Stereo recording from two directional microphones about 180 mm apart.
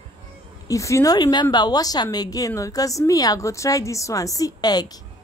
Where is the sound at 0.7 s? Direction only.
15° left (ahead or behind).